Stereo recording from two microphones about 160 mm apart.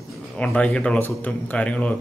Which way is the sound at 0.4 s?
5° left (ahead or behind).